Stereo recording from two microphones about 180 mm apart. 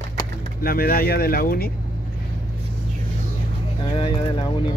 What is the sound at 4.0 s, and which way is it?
Speech, 25° left (ahead or behind).